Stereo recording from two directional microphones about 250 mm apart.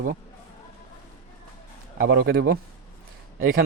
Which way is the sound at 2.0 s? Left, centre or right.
Right.